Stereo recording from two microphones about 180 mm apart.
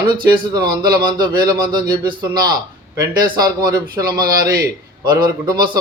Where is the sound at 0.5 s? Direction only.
25° right (ahead or behind).